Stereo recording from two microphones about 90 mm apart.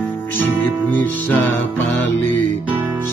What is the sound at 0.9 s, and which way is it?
Music, 20° left (ahead or behind).